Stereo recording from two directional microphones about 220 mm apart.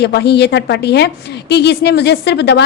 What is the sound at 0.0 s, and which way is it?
A woman's voice, 50° left (ahead or behind).